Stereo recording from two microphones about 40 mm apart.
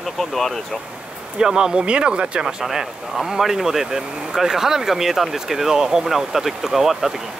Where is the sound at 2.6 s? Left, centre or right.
Centre.